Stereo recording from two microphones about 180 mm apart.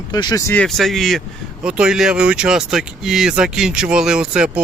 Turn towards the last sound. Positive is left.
turn(degrees=-5)  # may be behind; listen again after turning